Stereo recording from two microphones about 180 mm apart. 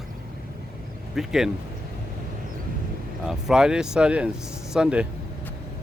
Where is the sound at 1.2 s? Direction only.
Centre (ahead or behind).